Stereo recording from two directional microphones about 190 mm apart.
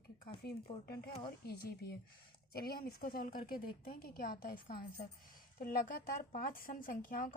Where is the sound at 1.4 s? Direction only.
55° left (ahead or behind).